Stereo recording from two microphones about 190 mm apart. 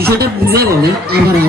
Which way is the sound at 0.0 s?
55° right (ahead or behind).